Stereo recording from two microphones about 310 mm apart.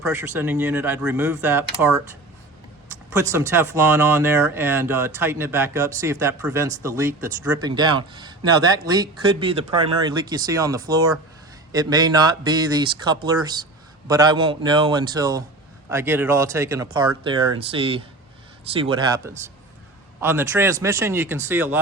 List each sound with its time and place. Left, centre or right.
0.1 s speech: centre
3.3 s speech: centre